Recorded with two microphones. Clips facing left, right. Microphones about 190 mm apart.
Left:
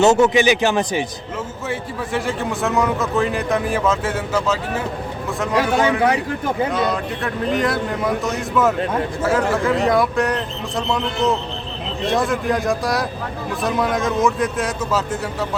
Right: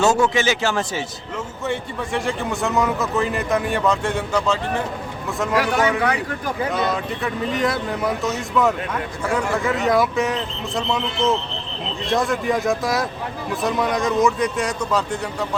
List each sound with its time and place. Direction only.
0.0 s a man's voice: 20° left (ahead or behind)
1.6 s a man's voice: centre (ahead or behind)
5.5 s speech: 25° left (ahead or behind)
6.7 s a man's voice: centre (ahead or behind)